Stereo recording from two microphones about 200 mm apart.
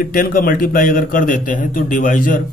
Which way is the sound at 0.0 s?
45° left (ahead or behind).